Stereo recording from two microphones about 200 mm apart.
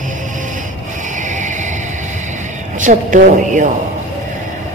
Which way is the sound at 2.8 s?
40° right (ahead or behind).